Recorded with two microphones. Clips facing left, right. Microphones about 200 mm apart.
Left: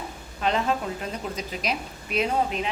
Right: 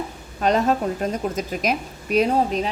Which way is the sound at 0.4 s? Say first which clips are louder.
Right 6 dB; 45° right (ahead or behind).